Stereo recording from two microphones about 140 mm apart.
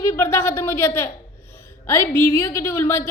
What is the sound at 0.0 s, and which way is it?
A woman's voice, 20° left (ahead or behind).